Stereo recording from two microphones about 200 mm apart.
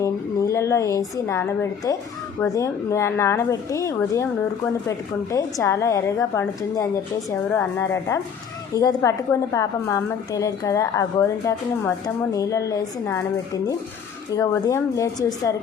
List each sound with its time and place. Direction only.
0.0 s a woman's voice: 15° left (ahead or behind)
14.3 s a woman's voice: 15° left (ahead or behind)